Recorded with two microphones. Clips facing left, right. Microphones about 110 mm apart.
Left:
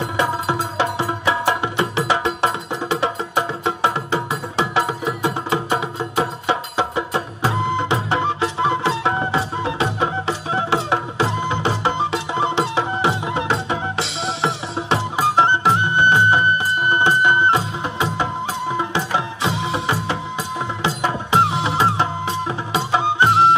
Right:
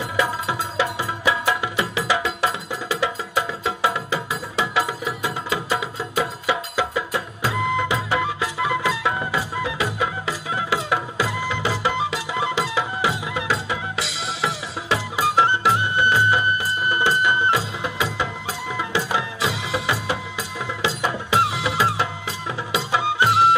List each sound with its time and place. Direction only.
0.2 s music: 25° left (ahead or behind)
6.1 s music: 30° left (ahead or behind)
21.0 s music: 25° left (ahead or behind)